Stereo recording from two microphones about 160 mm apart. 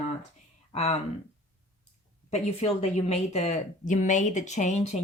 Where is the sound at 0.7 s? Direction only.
40° left (ahead or behind).